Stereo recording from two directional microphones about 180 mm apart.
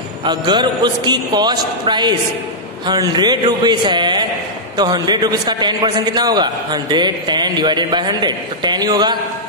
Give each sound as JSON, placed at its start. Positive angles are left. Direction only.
{"t": 0.2, "sound": "a man's voice", "side_deg": -25}